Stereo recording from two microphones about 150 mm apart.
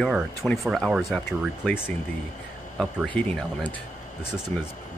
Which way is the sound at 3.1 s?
10° left (ahead or behind).